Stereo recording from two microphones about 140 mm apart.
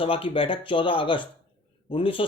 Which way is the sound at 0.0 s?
40° left (ahead or behind).